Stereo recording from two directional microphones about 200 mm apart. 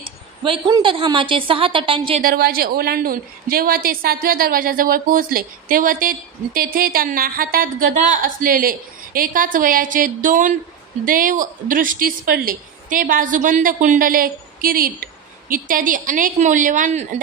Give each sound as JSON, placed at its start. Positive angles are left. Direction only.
{"t": 0.4, "sound": "a woman's voice", "side_deg": -20}
{"t": 2.2, "sound": "a woman's voice", "side_deg": -50}